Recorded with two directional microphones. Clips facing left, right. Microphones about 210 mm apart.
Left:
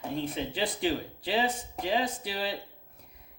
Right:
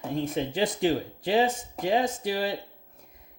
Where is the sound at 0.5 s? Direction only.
45° right (ahead or behind).